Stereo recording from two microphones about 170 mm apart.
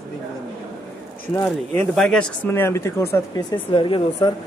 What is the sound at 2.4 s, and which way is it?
Speech, 15° left (ahead or behind).